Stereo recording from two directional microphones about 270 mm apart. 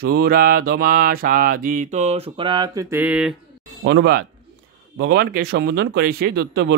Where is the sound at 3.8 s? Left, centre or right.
Right.